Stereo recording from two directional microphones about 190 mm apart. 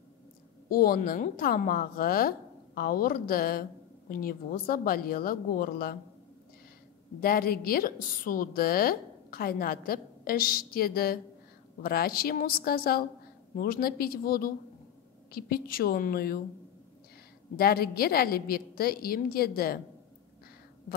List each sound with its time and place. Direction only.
0.7 s a woman's voice: 50° left (ahead or behind)
7.2 s a woman's voice: 50° left (ahead or behind)
17.6 s a woman's voice: 55° left (ahead or behind)